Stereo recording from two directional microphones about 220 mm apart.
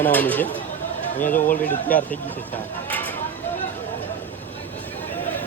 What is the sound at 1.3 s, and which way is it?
Speech, 35° left (ahead or behind).